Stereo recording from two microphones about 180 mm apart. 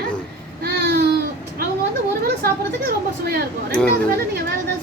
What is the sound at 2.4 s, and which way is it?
Speech, 60° right (ahead or behind).